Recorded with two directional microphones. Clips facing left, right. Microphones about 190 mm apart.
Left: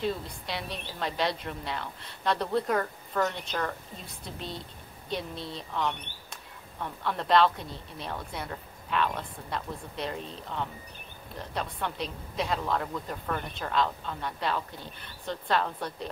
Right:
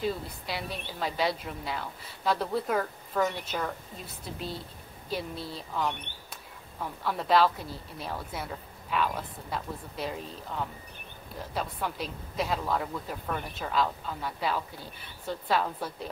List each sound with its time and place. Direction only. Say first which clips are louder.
0.0 s speech: even; 5° right (ahead or behind)